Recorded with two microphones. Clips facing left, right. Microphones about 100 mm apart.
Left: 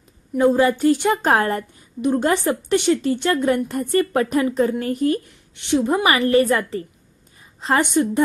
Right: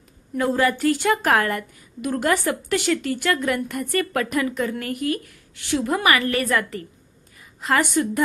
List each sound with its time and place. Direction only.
0.3 s a woman's voice: 20° left (ahead or behind)